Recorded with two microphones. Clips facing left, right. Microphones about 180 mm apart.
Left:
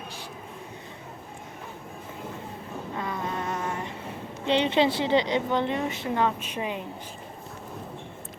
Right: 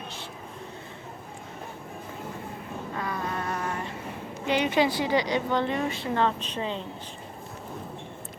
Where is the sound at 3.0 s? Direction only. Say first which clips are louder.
Even; 20° left (ahead or behind).